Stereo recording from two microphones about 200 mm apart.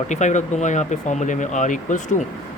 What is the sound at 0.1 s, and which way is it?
Speech, 35° left (ahead or behind).